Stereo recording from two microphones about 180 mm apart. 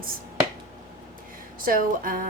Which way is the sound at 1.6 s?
50° right (ahead or behind).